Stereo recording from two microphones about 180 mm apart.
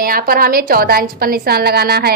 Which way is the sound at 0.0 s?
55° right (ahead or behind).